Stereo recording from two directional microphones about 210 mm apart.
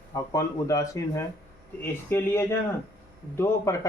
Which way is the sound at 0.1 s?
15° left (ahead or behind).